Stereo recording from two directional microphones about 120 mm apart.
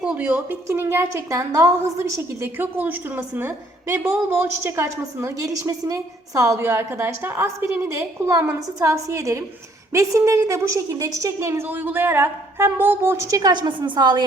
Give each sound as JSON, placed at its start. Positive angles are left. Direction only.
{"t": 0.0, "sound": "a woman's voice", "side_deg": -10}